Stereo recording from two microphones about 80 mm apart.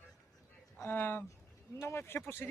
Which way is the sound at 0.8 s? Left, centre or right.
Left.